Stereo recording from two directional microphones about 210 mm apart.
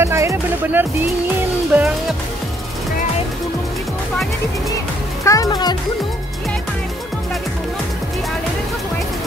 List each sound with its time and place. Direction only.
0.0 s music: 15° right (ahead or behind)
1.7 s speech: 5° right (ahead or behind)
5.2 s speech: 15° left (ahead or behind)